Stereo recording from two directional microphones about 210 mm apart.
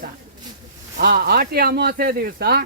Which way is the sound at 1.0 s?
50° right (ahead or behind).